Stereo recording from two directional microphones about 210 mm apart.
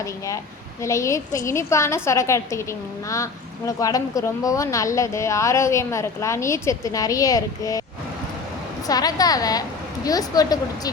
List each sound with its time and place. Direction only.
0.8 s a woman's voice: 15° left (ahead or behind)
8.9 s a woman's voice: 20° left (ahead or behind)